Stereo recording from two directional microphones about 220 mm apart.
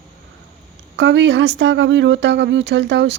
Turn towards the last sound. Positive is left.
turn(degrees=-55)  # may be behind; listen again after turning